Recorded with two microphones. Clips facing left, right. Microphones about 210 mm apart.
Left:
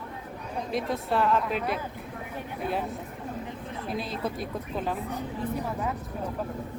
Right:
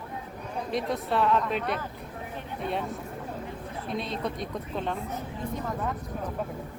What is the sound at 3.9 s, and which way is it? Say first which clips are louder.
Speech: even; 5° left (ahead or behind).